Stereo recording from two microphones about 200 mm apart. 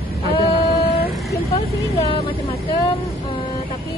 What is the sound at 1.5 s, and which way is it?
Speech, 30° left (ahead or behind).